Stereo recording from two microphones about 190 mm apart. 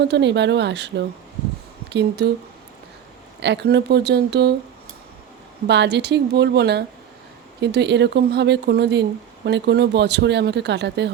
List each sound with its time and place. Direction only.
0.0 s speech: 65° right (ahead or behind)
3.4 s speech: 65° right (ahead or behind)
5.6 s speech: 65° right (ahead or behind)